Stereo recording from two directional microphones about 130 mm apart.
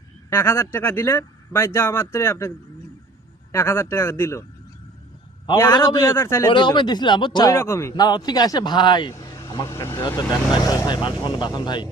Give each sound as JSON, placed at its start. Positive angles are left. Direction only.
{"t": 0.3, "sound": "speech", "side_deg": 20}
{"t": 3.5, "sound": "speech", "side_deg": 20}
{"t": 5.5, "sound": "speech", "side_deg": 20}
{"t": 6.5, "sound": "speech", "side_deg": 40}
{"t": 7.5, "sound": "speech", "side_deg": 20}
{"t": 7.9, "sound": "speech", "side_deg": 30}
{"t": 9.3, "sound": "vehicle", "side_deg": 25}
{"t": 10.2, "sound": "speech", "side_deg": 30}